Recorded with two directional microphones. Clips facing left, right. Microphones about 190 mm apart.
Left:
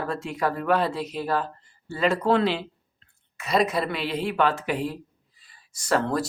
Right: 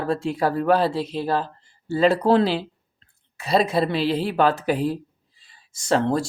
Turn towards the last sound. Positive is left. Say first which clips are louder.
# right 3 dB
turn(degrees=-25)  # may be behind; listen again after turning